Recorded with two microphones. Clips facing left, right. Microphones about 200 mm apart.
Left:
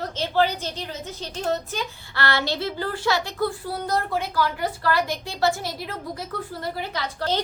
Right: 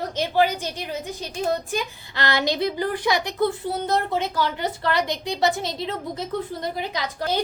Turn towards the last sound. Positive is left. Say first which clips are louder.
# right 1 dB
turn(degrees=-10)  # may be behind; listen again after turning